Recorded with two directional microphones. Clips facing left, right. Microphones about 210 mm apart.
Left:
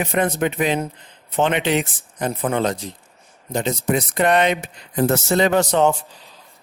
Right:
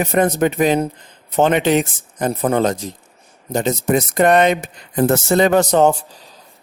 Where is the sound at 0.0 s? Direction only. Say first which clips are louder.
Right 4 dB; 45° right (ahead or behind).